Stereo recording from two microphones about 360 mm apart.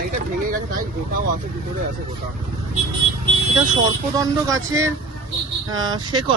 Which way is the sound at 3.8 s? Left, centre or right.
Centre.